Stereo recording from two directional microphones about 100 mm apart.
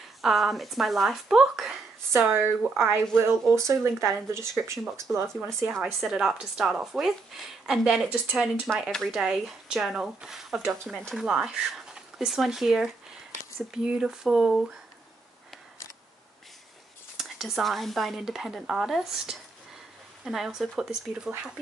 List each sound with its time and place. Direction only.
0.2 s speech: centre (ahead or behind)
2.3 s speech: 25° right (ahead or behind)
5.9 s speech: 5° right (ahead or behind)
8.1 s speech: 15° right (ahead or behind)
8.6 s speech: centre (ahead or behind)
11.1 s speech: 5° right (ahead or behind)
17.2 s speech: centre (ahead or behind)